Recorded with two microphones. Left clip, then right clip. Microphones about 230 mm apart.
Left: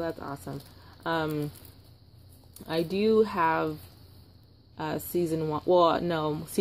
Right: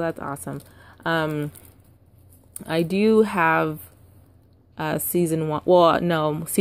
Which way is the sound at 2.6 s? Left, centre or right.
Right.